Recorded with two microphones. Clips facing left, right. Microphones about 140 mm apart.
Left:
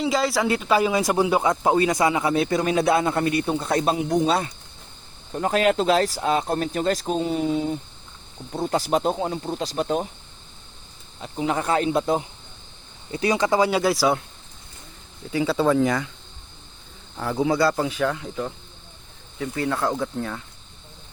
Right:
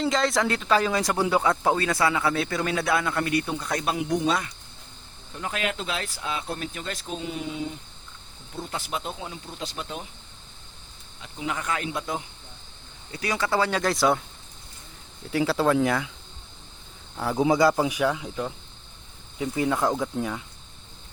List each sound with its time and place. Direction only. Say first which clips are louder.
0.0 s speech: left 2 dB; 5° left (ahead or behind); by 4.5 s 30° left (ahead or behind)
5.3 s speech: left 10 dB; 40° left (ahead or behind)
11.2 s speech: left 7 dB; 35° left (ahead or behind); by 14.3 s centre (ahead or behind)
15.3 s speech: left 2 dB; centre (ahead or behind)
17.2 s speech: even; 10° right (ahead or behind)
19.4 s speech: even; 15° right (ahead or behind)